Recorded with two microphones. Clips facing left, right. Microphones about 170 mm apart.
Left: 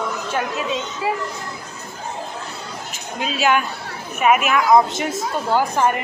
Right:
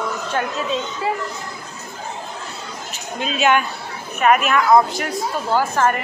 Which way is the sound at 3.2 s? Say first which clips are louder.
Right 1 dB; centre (ahead or behind).